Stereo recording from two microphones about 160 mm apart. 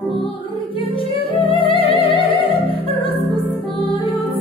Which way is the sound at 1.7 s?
35° left (ahead or behind).